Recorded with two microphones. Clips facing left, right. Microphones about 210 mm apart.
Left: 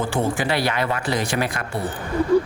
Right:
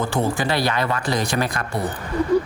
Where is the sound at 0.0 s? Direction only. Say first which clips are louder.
Even; 40° right (ahead or behind).